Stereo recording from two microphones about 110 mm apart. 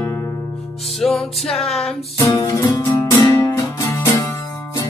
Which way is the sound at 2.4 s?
30° left (ahead or behind).